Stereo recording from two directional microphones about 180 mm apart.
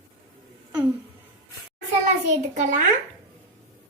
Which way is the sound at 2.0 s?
40° right (ahead or behind).